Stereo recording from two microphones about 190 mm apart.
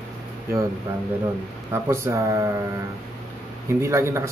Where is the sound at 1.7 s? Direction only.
15° right (ahead or behind).